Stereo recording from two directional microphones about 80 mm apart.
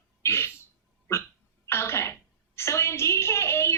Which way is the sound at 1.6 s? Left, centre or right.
Left.